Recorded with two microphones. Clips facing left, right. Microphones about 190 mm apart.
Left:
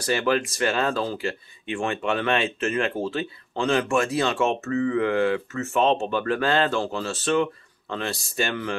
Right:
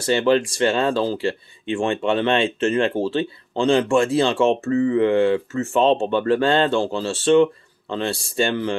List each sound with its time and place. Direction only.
0.0 s speech: 25° right (ahead or behind)